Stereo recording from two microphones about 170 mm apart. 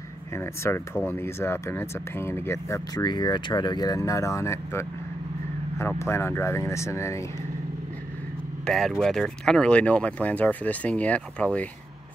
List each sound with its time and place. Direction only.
0.4 s speech: 15° left (ahead or behind)
8.6 s speech: 5° left (ahead or behind)